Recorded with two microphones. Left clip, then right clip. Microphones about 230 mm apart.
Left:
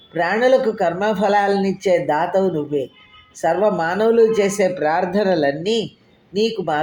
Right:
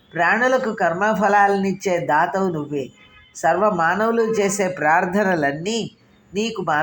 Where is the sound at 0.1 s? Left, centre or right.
Centre.